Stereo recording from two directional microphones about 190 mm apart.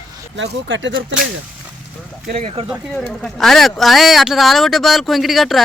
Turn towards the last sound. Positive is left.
turn(degrees=0)  # may be behind; listen again after turning